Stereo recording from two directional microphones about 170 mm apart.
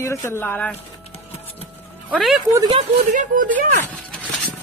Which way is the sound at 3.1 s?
50° right (ahead or behind).